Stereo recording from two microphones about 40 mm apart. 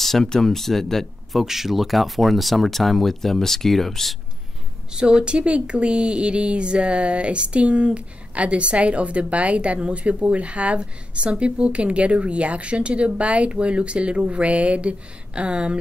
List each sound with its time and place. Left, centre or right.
0.0 s speech: centre
1.4 s speech: centre
4.9 s speech: right